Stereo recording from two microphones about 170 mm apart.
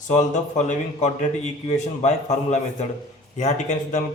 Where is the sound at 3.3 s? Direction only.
45° left (ahead or behind).